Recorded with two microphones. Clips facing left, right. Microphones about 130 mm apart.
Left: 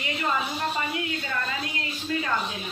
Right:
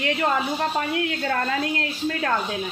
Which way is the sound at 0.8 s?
65° right (ahead or behind).